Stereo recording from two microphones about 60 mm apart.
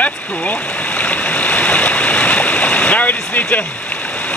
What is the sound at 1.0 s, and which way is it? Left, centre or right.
Stream, left.